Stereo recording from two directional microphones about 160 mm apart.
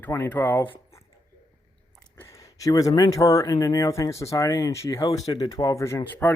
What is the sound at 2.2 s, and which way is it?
Speech, 20° left (ahead or behind).